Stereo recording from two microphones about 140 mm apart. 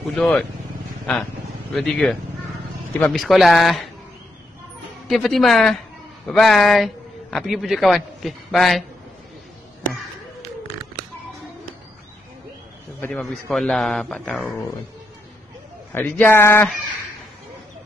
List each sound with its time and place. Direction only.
0.1 s a man's voice: 5° left (ahead or behind)
5.0 s a man's voice: centre (ahead or behind)
13.1 s a man's voice: centre (ahead or behind)
15.9 s speech: 10° left (ahead or behind)